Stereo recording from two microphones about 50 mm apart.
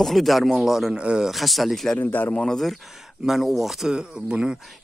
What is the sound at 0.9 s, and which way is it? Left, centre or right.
Speech, right.